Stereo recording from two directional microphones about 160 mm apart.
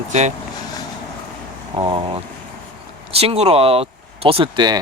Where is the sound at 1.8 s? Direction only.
35° right (ahead or behind).